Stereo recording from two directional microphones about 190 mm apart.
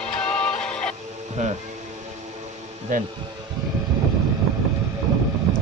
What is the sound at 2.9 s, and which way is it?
Speech, 40° right (ahead or behind).